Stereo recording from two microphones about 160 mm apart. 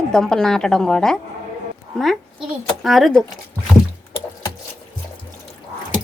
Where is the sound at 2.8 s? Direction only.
Centre (ahead or behind).